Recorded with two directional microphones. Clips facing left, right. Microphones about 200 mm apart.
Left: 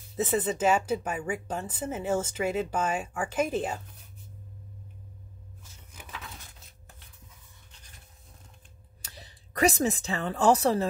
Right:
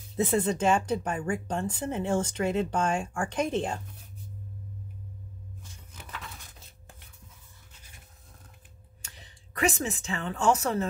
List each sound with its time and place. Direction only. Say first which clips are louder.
0.1 s speech: right 2 dB; centre (ahead or behind)
5.6 s a sound: right 2 dB; 10° left (ahead or behind)
9.0 s speech: left 4 dB; 35° left (ahead or behind)